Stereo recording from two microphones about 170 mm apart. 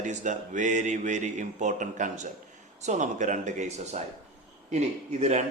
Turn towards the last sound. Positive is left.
turn(degrees=-45)  # may be behind; listen again after turning